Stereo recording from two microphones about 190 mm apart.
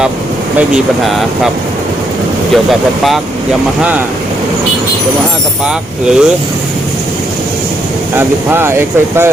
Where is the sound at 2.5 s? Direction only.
Centre (ahead or behind).